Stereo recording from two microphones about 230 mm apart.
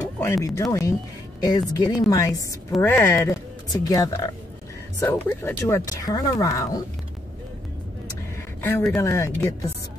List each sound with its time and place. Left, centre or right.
0.2 s speech: centre
8.1 s speech: centre